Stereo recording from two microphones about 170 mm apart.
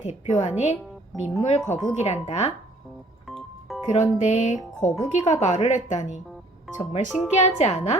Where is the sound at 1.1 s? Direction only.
Centre (ahead or behind).